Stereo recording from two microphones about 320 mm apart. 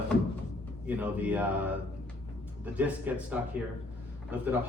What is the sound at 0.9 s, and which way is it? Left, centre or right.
Speech, centre.